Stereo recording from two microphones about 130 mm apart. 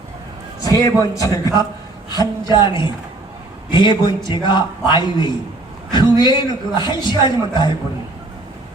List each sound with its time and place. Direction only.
0.6 s a man's voice: 25° left (ahead or behind)